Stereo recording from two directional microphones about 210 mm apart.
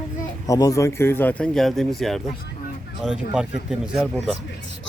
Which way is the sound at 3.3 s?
5° right (ahead or behind).